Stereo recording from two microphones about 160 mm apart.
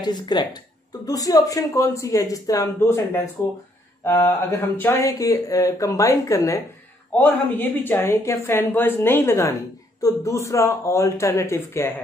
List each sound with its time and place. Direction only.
0.0 s a woman's voice: 25° left (ahead or behind)